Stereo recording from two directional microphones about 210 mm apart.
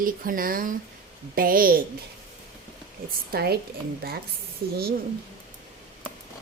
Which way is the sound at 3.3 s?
45° right (ahead or behind).